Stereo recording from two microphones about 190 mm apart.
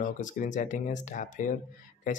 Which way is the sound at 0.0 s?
45° left (ahead or behind).